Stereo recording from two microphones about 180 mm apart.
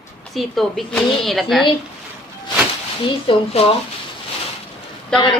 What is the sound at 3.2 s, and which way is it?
Speech, 35° left (ahead or behind).